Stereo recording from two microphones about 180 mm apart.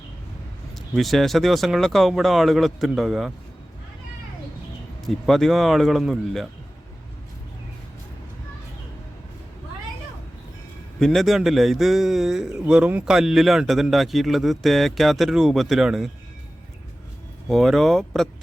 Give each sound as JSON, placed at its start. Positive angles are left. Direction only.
{"t": 0.9, "sound": "a man's voice", "side_deg": 0}
{"t": 5.0, "sound": "a man's voice", "side_deg": 0}
{"t": 11.0, "sound": "a man's voice", "side_deg": 0}
{"t": 17.5, "sound": "a man's voice", "side_deg": 0}